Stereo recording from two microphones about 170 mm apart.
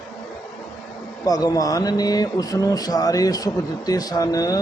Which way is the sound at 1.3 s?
20° left (ahead or behind).